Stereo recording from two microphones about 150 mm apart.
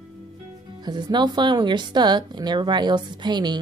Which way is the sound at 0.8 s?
30° right (ahead or behind).